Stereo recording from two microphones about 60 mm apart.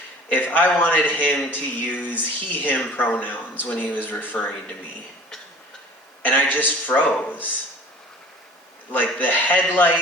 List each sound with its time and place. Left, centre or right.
0.3 s speech: left
6.2 s speech: left
8.9 s speech: left